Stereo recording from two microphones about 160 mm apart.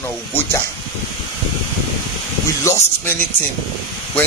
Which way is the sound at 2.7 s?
20° left (ahead or behind).